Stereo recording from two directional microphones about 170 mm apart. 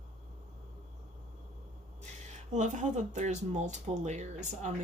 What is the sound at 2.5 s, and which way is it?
Speech, 45° right (ahead or behind).